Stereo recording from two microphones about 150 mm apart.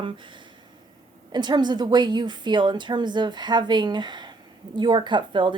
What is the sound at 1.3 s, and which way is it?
A woman's voice, 30° right (ahead or behind).